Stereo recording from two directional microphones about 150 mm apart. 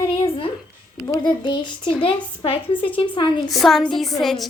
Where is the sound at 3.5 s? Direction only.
Centre (ahead or behind).